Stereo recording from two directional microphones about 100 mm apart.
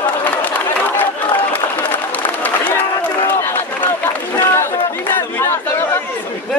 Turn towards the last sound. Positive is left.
turn(degrees=25)  # may be behind; listen again after turning